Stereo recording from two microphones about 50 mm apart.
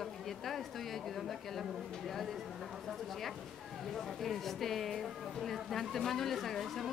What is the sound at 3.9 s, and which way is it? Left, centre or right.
A woman's voice, centre.